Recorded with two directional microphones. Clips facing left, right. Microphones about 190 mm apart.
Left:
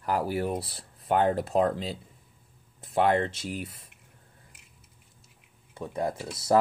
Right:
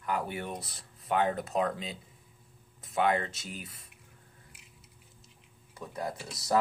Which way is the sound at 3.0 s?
30° left (ahead or behind).